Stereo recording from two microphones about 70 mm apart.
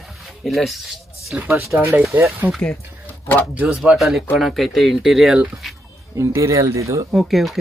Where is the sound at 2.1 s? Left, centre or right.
Right.